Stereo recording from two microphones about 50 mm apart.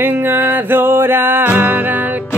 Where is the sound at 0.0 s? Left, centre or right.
Right.